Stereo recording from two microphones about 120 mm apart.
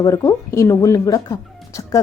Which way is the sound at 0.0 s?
30° left (ahead or behind).